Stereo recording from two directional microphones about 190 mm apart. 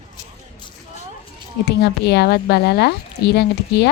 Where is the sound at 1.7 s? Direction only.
60° left (ahead or behind).